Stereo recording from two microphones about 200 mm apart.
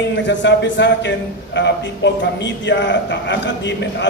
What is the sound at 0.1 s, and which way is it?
A man's voice, 65° left (ahead or behind).